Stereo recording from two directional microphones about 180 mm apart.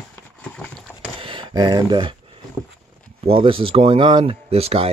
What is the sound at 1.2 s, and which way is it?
Speech, 25° right (ahead or behind).